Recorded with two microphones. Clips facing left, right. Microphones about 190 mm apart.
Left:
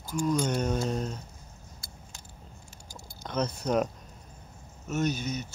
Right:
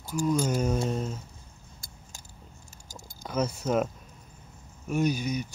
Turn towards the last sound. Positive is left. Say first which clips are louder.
# right 3 dB
turn(degrees=-10)  # may be behind; listen again after turning